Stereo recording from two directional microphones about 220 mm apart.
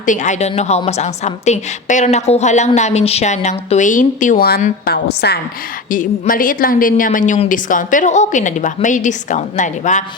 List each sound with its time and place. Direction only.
0.0 s a woman's voice: 35° left (ahead or behind)